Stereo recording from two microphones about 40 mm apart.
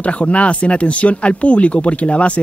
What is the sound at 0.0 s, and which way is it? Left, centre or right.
Speech, left.